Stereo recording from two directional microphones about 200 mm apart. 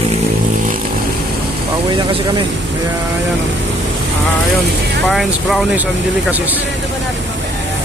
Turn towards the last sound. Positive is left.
turn(degrees=-10)  # may be behind; listen again after turning